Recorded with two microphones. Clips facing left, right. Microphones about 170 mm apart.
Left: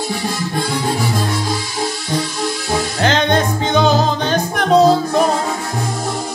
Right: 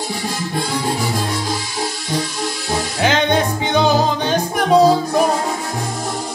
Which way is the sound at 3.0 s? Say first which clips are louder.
Even; 10° right (ahead or behind).